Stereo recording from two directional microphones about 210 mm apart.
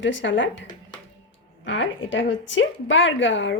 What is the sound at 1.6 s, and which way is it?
Speech, 65° left (ahead or behind).